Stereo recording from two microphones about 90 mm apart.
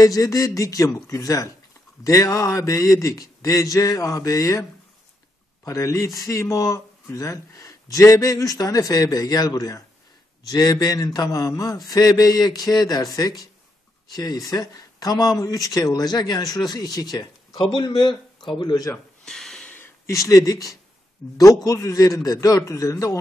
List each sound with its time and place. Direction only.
0.0 s speech: 40° left (ahead or behind)
5.7 s speech: 35° left (ahead or behind)
17.6 s a man's voice: 65° left (ahead or behind)
19.2 s a sound: 5° left (ahead or behind)
20.1 s speech: 35° left (ahead or behind)